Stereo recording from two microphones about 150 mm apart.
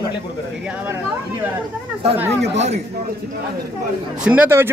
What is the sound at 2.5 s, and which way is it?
Speech, 45° right (ahead or behind).